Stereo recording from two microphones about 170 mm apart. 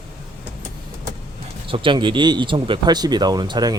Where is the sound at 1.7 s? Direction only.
30° right (ahead or behind).